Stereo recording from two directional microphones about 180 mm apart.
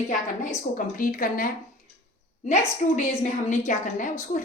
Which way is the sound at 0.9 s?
50° left (ahead or behind).